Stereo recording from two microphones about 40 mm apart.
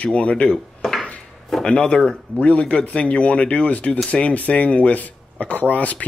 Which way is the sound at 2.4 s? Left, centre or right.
Left.